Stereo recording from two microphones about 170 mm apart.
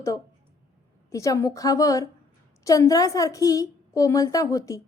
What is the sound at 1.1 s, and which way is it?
A woman's voice, 20° left (ahead or behind).